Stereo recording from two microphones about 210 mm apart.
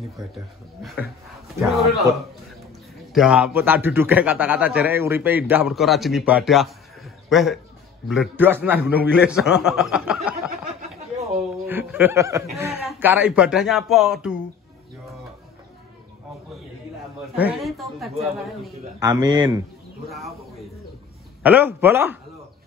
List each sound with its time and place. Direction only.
1.6 s a man's voice: centre (ahead or behind)
3.1 s a man's voice: 5° right (ahead or behind)
11.6 s a man's voice: 10° right (ahead or behind)
17.4 s a man's voice: 5° right (ahead or behind)
18.9 s a man's voice: 20° right (ahead or behind)
20.1 s a man's voice: centre (ahead or behind)